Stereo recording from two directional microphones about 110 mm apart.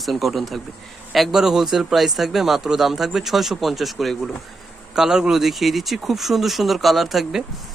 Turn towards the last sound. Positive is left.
turn(degrees=0)  # may be behind; listen again after turning